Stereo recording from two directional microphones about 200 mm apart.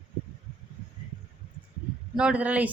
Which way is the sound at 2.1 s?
5° right (ahead or behind).